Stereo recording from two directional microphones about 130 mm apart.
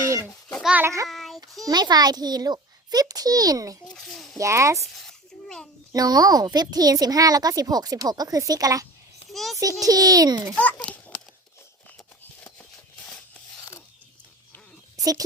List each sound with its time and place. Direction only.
0.0 s a sound: 25° right (ahead or behind)
0.6 s a child's voice: 10° right (ahead or behind)
1.0 s child singing: centre (ahead or behind)
1.6 s speech: 30° right (ahead or behind)
3.8 s a child's voice: 5° left (ahead or behind)
4.4 s speech: 25° right (ahead or behind)
4.9 s a sound: 5° left (ahead or behind)
5.9 s speech: 30° right (ahead or behind)
9.3 s a child's voice: centre (ahead or behind)
9.8 s speech: 30° right (ahead or behind)
10.5 s a child's voice: 5° left (ahead or behind)
14.9 s a sound: 25° right (ahead or behind)